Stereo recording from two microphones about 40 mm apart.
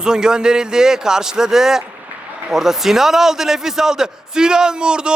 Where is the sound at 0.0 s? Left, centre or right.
Centre.